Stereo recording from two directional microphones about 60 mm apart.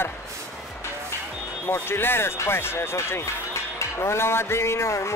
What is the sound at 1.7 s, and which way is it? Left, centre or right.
A man's voice, left.